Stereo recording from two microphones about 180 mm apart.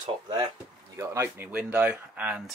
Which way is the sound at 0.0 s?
25° right (ahead or behind).